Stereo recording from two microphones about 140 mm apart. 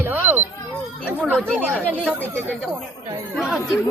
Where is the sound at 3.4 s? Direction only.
Centre (ahead or behind).